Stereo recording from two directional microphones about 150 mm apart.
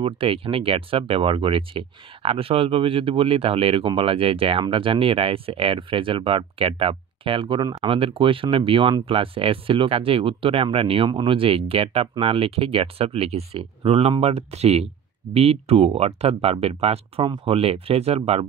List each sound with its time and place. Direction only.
0.0 s speech: 35° right (ahead or behind)